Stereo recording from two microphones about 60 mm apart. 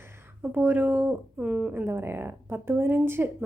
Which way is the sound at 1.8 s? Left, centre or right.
Right.